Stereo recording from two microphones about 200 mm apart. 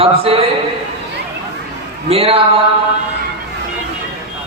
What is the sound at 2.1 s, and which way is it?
Speech, 30° right (ahead or behind).